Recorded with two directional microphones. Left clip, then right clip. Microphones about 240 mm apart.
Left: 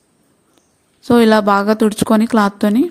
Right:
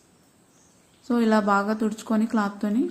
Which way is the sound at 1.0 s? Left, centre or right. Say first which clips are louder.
Left 11 dB; left.